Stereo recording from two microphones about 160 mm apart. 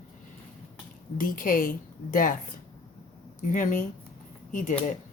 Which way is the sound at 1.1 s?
60° left (ahead or behind).